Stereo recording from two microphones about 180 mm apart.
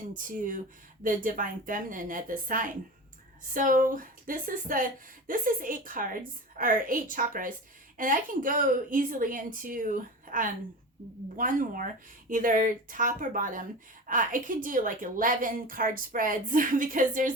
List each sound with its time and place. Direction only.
0.1 s a woman's voice: 45° right (ahead or behind)